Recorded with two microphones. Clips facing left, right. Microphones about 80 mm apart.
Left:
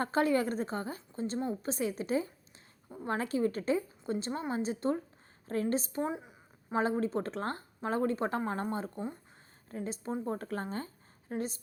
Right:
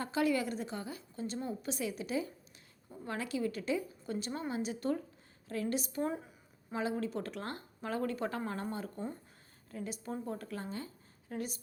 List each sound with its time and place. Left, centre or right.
0.0 s a woman's voice: left
6.1 s a sound: centre
6.7 s a woman's voice: left
9.0 s a woman's voice: centre
9.6 s speech: left